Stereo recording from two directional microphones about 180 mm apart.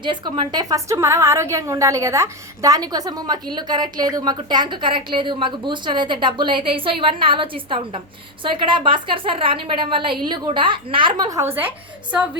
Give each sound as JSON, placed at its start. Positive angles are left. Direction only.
{"t": 0.0, "sound": "a woman's voice", "side_deg": -25}